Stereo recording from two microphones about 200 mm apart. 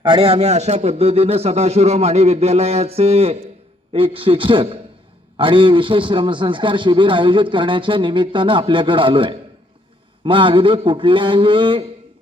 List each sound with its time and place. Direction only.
0.0 s a man's voice: 25° right (ahead or behind)